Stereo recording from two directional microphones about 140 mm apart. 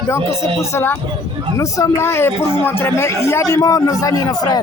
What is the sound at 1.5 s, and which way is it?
A man's voice, 20° left (ahead or behind).